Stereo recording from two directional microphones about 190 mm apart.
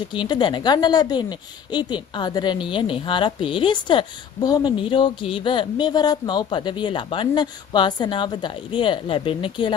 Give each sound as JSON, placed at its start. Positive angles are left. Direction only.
{"t": 0.1, "sound": "a woman's voice", "side_deg": 25}